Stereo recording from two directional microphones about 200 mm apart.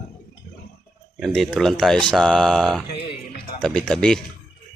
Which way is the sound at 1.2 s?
Centre (ahead or behind).